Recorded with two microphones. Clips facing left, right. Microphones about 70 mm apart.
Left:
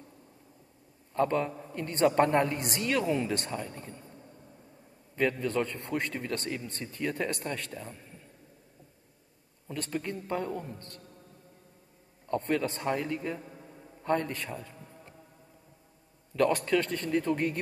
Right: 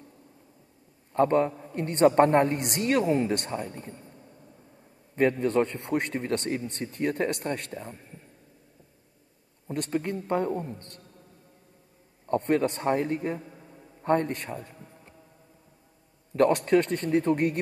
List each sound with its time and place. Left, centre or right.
1.1 s a man's voice: right
2.7 s a man's voice: right
3.8 s a man's voice: right
5.1 s a man's voice: right
7.7 s a man's voice: right
9.8 s a man's voice: right
12.3 s a man's voice: right
13.4 s a sound: centre
14.0 s a man's voice: right
16.3 s a man's voice: right